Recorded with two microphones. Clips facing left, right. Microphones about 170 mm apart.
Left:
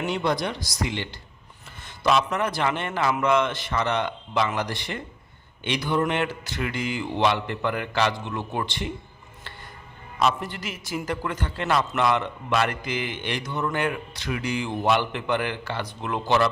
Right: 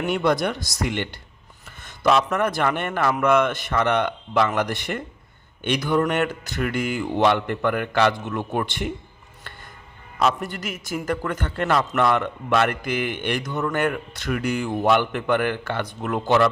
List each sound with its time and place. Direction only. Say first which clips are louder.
0.0 s a man's voice: right 4 dB; 55° right (ahead or behind)
10.2 s a man's voice: right 2 dB; 45° right (ahead or behind)